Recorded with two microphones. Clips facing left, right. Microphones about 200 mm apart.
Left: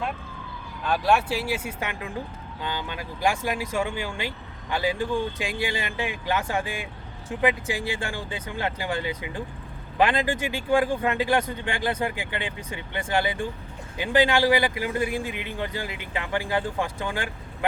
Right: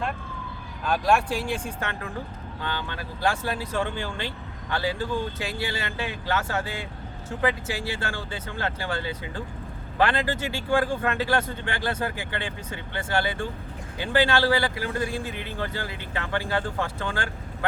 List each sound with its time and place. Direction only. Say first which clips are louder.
0.9 s a man's voice: even; centre (ahead or behind)